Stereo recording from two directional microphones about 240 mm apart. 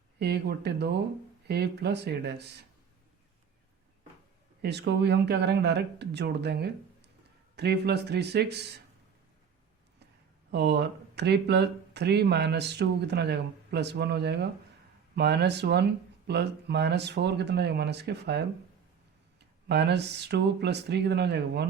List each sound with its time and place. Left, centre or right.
0.2 s speech: right
4.6 s speech: right
10.5 s speech: right
19.6 s speech: right